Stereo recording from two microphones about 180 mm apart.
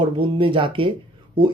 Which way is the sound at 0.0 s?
25° right (ahead or behind).